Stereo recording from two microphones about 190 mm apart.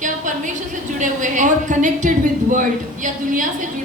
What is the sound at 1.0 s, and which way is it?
A woman's voice, 40° right (ahead or behind).